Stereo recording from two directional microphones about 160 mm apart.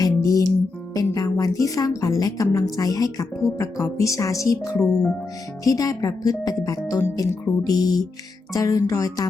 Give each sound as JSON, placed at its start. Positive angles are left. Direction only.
{"t": 0.0, "sound": "music", "side_deg": 20}
{"t": 0.9, "sound": "a woman's voice", "side_deg": 20}